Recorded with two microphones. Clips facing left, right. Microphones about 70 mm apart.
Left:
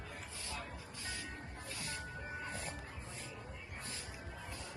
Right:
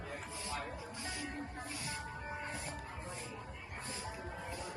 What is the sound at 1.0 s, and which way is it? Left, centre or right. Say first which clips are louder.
Music: right 2 dB; right.